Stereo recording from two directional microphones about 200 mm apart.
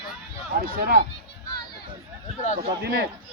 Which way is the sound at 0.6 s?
50° right (ahead or behind).